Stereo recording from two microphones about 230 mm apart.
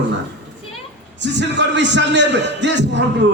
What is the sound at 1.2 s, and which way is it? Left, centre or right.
A man's voice, right.